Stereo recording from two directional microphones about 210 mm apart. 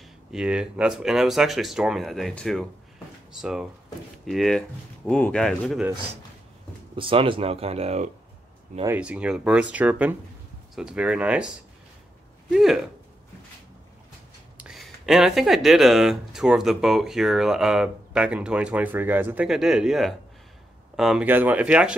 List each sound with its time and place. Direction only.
0.3 s speech: 5° right (ahead or behind)
7.0 s speech: 25° right (ahead or behind)
8.8 s speech: 5° right (ahead or behind)
14.6 s speech: centre (ahead or behind)